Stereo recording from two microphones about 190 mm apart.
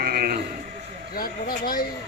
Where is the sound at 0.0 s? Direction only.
50° right (ahead or behind).